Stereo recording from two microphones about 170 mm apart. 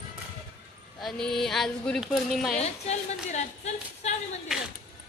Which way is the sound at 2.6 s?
40° left (ahead or behind).